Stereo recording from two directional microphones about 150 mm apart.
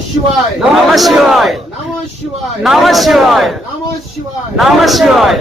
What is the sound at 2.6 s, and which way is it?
A man's voice, centre (ahead or behind).